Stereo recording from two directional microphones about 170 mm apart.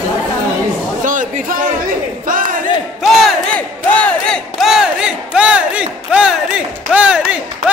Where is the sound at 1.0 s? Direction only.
50° right (ahead or behind).